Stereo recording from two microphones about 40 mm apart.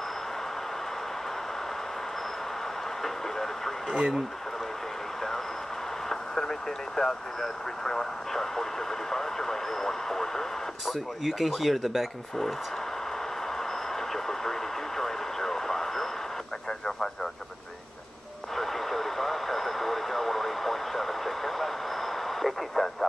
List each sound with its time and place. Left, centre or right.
3.0 s vehicle: centre
3.9 s speech: centre
7.0 s speech: centre
10.9 s speech: centre
13.6 s speech: centre
18.6 s vehicle: centre